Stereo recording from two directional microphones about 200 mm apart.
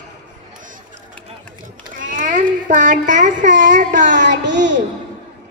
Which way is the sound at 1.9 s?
40° right (ahead or behind).